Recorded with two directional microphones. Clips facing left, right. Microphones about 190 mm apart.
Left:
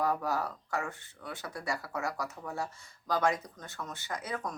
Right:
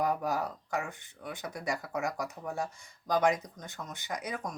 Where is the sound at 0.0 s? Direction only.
15° right (ahead or behind).